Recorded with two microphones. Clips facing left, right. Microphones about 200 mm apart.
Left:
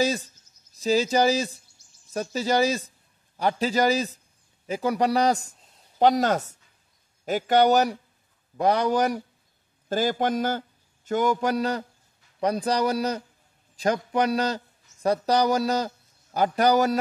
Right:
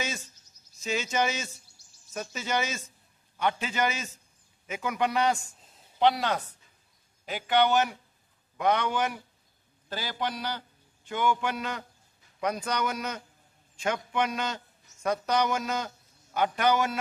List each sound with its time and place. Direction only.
0.0 s a man's voice: 35° left (ahead or behind)
1.8 s insect: 35° right (ahead or behind)
2.1 s a man's voice: 35° left (ahead or behind)
5.6 s a sound: centre (ahead or behind)
5.9 s a man's voice: 40° left (ahead or behind)